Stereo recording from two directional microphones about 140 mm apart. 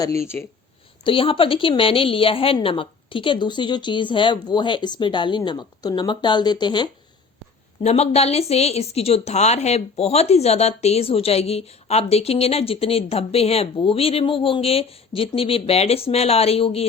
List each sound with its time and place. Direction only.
1.0 s a woman's voice: 40° left (ahead or behind)
7.8 s speech: 50° left (ahead or behind)